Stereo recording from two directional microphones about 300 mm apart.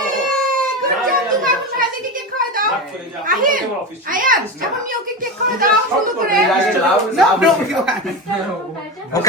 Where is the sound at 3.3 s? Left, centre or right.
Right.